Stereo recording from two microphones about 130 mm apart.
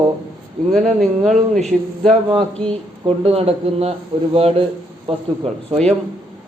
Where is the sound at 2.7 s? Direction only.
45° right (ahead or behind).